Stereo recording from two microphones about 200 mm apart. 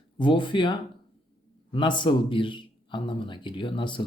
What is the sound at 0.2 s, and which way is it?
A man's voice, 25° left (ahead or behind).